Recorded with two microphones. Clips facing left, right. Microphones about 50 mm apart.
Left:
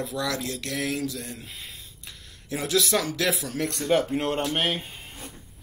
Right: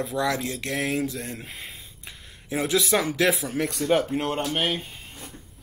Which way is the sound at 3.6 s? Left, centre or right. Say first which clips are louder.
Even; centre.